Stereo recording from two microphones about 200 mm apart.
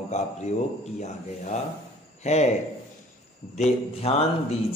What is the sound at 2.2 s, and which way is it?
Speech, 35° left (ahead or behind).